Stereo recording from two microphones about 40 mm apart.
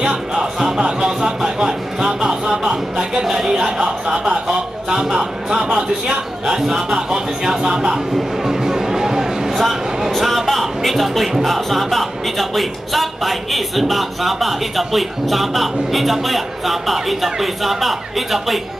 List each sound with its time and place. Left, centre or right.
0.1 s music: centre
1.6 s a sound: centre
3.5 s a man's voice: centre
7.4 s music: centre
9.6 s speech: centre